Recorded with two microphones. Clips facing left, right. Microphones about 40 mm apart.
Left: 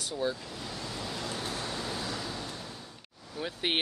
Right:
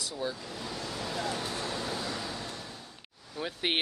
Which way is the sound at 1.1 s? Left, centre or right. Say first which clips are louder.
Right 3 dB; right.